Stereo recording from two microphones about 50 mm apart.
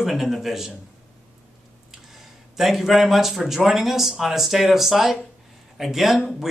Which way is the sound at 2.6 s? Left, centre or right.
Centre.